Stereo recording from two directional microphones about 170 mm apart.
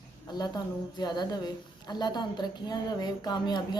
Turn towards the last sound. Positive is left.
turn(degrees=25)  # may be behind; listen again after turning